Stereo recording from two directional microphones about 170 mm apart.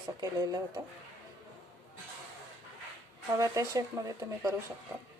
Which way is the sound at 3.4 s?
20° right (ahead or behind).